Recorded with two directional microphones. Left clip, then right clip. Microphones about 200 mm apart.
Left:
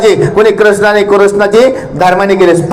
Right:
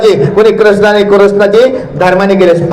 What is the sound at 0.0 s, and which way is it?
A man's voice, 45° left (ahead or behind).